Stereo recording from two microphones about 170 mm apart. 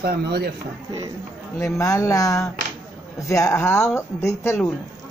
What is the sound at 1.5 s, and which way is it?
Speech, 15° left (ahead or behind).